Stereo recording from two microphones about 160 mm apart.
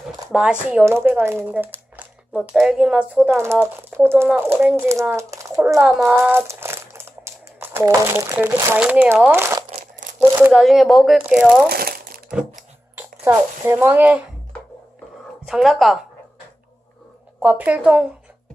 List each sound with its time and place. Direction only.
0.3 s speech: 5° right (ahead or behind)
5.5 s speech: 5° right (ahead or behind)
9.8 s crumpling: 55° right (ahead or behind)
10.5 s speech: centre (ahead or behind)
11.7 s crumpling: 70° right (ahead or behind)
13.0 s speech: 15° right (ahead or behind)
15.4 s speech: centre (ahead or behind)
17.4 s speech: 10° right (ahead or behind)